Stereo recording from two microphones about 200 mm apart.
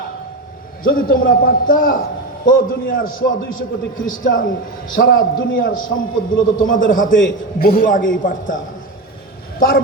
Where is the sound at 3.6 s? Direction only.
45° left (ahead or behind).